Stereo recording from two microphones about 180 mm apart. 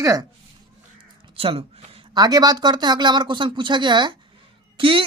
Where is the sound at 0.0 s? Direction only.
20° right (ahead or behind).